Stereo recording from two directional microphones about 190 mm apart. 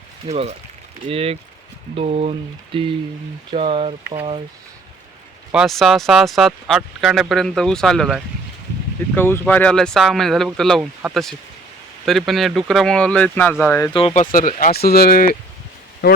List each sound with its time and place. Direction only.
0.3 s speech: 35° right (ahead or behind)
5.5 s speech: centre (ahead or behind)
13.9 s speech: 30° left (ahead or behind)
14.3 s speech: 45° left (ahead or behind)